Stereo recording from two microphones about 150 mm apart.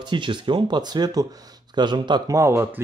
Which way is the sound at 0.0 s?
30° right (ahead or behind).